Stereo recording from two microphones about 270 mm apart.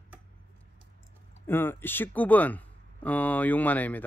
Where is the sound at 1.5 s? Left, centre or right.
Centre.